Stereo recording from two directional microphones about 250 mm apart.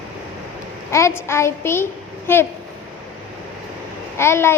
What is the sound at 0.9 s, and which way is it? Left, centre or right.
A child's voice, centre.